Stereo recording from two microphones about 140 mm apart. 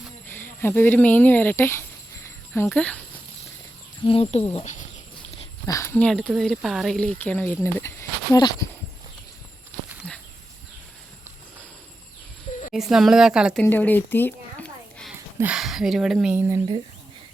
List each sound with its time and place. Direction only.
0.3 s speech: 15° left (ahead or behind)
4.0 s speech: 45° left (ahead or behind)
5.6 s speech: 20° left (ahead or behind)
6.0 s speech: 5° left (ahead or behind); by 8.5 s 25° left (ahead or behind)
10.0 s a sound: 10° left (ahead or behind)
12.7 s speech: centre (ahead or behind)
13.6 s a sound: 10° left (ahead or behind)
15.5 s speech: 5° right (ahead or behind)
16.3 s speech: 20° right (ahead or behind)